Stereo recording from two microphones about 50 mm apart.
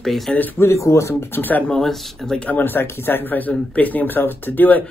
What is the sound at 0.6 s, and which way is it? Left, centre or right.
Speech, left.